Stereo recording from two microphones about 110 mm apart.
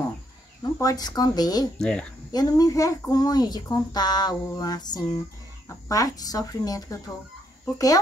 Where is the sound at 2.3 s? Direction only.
35° left (ahead or behind).